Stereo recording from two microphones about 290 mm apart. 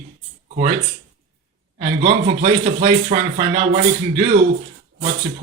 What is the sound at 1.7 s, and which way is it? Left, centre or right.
Speech, right.